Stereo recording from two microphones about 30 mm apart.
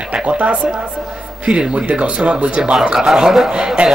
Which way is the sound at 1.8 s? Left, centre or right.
Right.